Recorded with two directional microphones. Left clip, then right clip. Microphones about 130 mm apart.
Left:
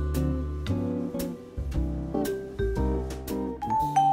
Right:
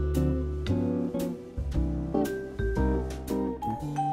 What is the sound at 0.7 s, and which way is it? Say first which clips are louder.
Music: right 1 dB; centre (ahead or behind).